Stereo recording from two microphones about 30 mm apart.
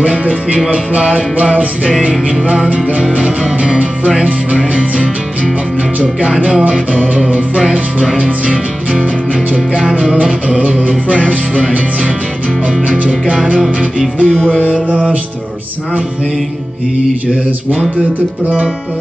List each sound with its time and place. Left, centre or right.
0.0 s music: right
3.1 s mantra: right
14.2 s music: left
14.6 s mantra: right